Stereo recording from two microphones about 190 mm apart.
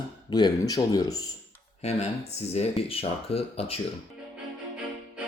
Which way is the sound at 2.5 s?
30° left (ahead or behind).